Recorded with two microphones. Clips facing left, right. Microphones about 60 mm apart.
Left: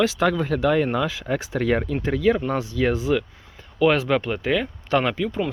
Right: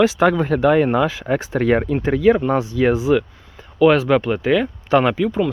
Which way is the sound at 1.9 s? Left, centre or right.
Right.